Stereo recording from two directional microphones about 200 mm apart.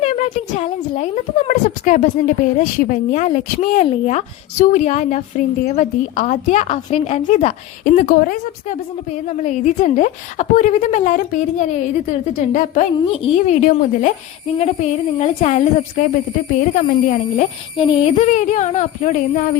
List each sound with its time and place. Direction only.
0.0 s speech: 35° left (ahead or behind)
12.5 s speech: 40° left (ahead or behind)